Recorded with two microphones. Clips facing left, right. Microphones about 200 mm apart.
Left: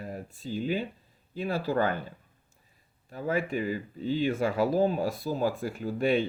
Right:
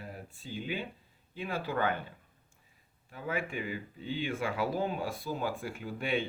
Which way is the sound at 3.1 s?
40° left (ahead or behind).